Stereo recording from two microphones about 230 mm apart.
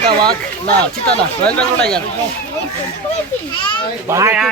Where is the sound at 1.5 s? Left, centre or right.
Centre.